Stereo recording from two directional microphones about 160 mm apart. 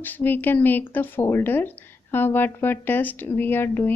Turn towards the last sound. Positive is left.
turn(degrees=15)  # may be behind; listen again after turning